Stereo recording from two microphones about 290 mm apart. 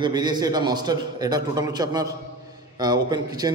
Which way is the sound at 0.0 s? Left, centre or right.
Centre.